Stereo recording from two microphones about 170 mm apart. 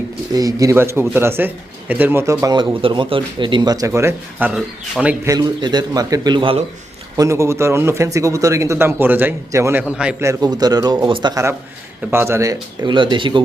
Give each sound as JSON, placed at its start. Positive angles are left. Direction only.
{"t": 0.3, "sound": "speech", "side_deg": -20}
{"t": 5.2, "sound": "a man's voice", "side_deg": -20}
{"t": 7.2, "sound": "speech", "side_deg": -15}
{"t": 9.8, "sound": "a man's voice", "side_deg": -5}
{"t": 10.2, "sound": "a man's voice", "side_deg": -25}